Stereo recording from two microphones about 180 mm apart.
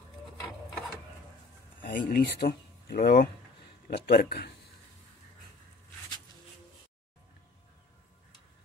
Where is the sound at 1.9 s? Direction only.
60° left (ahead or behind).